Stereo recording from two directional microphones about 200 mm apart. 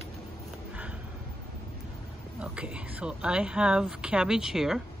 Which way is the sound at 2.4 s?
5° right (ahead or behind).